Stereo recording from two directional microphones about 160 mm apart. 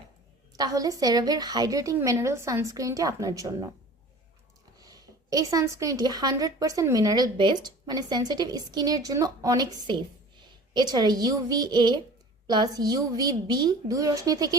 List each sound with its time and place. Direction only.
0.5 s a woman's voice: 25° right (ahead or behind)
4.8 s a woman's voice: 25° right (ahead or behind)